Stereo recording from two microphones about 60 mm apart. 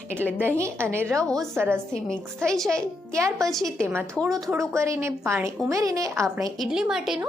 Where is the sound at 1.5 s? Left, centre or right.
Right.